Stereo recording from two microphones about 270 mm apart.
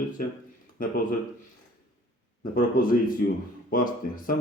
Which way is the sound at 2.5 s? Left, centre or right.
Left.